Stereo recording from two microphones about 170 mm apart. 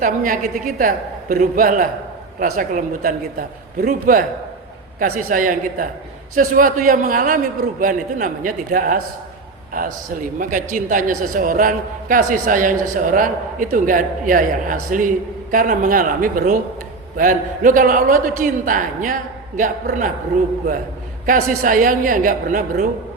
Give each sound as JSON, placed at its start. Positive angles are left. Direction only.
{"t": 0.0, "sound": "a woman's voice", "side_deg": -50}
{"t": 21.2, "sound": "speech", "side_deg": -55}